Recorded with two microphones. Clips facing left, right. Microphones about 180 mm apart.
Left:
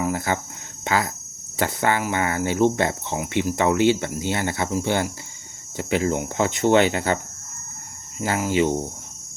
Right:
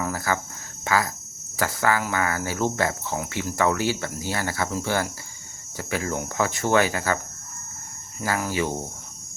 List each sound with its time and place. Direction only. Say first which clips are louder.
0.0 s cricket: left 3 dB; 20° left (ahead or behind)
0.9 s speech: left 1 dB; 25° left (ahead or behind)
8.2 s speech: left 5 dB; 25° left (ahead or behind)